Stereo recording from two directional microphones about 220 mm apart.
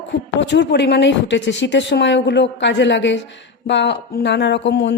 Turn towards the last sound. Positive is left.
turn(degrees=50)  # may be behind; listen again after turning